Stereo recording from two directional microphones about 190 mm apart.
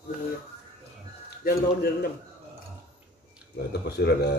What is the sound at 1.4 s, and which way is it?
Speech, 55° left (ahead or behind).